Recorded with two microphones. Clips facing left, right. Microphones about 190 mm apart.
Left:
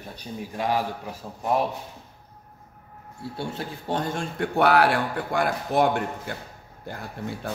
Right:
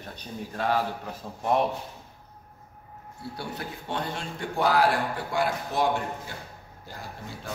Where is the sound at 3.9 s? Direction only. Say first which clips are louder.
Left 5 dB; 45° left (ahead or behind).